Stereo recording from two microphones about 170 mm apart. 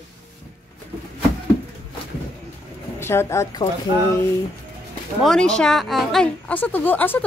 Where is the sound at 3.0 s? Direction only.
15° left (ahead or behind).